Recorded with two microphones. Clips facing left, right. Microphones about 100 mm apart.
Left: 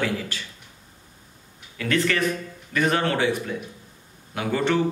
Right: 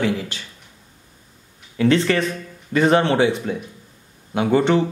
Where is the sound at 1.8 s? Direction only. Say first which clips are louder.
Right 6 dB; 25° right (ahead or behind).